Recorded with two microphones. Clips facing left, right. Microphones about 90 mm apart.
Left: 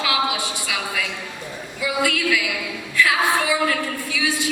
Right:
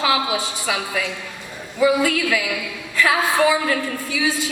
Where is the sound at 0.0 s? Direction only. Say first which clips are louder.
Right 2 dB; 35° right (ahead or behind).